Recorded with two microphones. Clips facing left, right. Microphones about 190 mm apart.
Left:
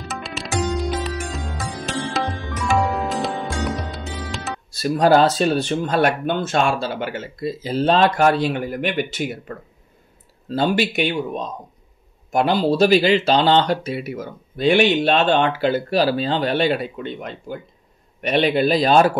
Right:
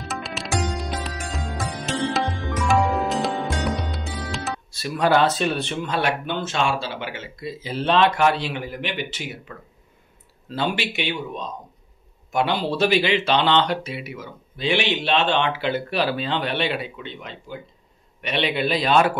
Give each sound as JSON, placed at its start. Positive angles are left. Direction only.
{"t": 0.0, "sound": "music", "side_deg": 0}
{"t": 4.7, "sound": "a man's voice", "side_deg": 40}